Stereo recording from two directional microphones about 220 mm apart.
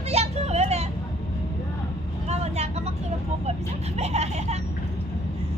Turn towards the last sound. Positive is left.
turn(degrees=-30)  # may be behind; listen again after turning